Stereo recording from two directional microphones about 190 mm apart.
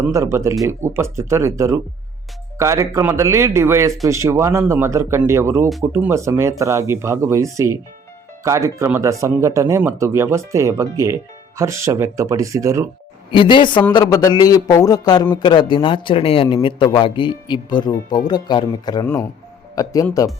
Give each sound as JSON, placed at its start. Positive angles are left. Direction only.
{"t": 0.1, "sound": "speech", "side_deg": -15}
{"t": 13.3, "sound": "a man's voice", "side_deg": 25}